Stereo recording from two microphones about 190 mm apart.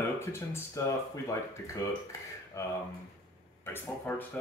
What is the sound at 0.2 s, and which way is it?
Speech, 15° left (ahead or behind).